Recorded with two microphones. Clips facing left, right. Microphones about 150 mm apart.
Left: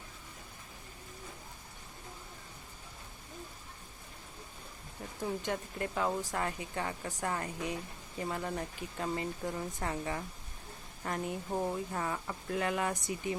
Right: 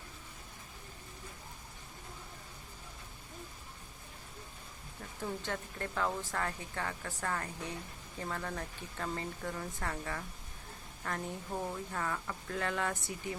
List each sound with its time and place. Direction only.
5.2 s speech: 15° left (ahead or behind)